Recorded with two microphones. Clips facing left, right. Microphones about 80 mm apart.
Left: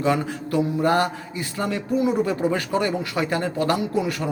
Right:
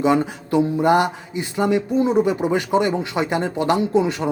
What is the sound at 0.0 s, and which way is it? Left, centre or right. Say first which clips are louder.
Mantra: right 4 dB; centre.